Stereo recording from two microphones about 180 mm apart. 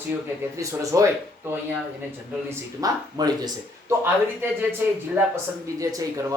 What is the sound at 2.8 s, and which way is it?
Speech, 20° right (ahead or behind).